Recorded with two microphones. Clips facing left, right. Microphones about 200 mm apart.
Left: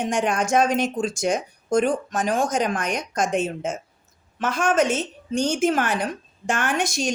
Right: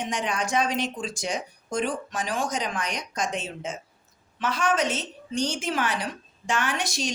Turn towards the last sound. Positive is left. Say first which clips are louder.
# left 4 dB
turn(degrees=50)  # may be behind; listen again after turning